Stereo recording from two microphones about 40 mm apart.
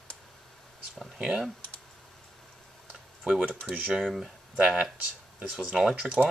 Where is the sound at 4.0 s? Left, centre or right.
Centre.